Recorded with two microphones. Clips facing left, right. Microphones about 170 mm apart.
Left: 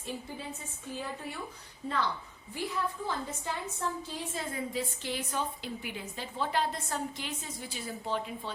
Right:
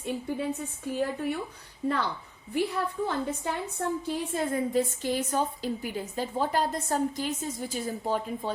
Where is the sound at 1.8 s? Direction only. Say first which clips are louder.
Right 7 dB; 75° right (ahead or behind).